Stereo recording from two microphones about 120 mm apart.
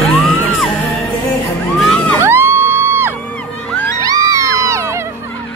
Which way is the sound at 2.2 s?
20° right (ahead or behind).